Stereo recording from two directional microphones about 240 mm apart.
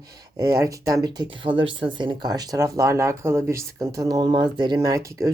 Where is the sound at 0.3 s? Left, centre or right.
Centre.